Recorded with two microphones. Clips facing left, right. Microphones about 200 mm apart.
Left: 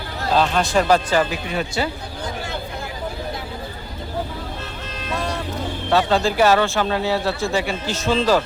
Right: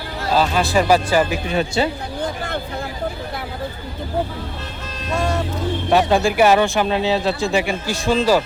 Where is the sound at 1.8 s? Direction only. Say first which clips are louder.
Right 4 dB; 25° right (ahead or behind).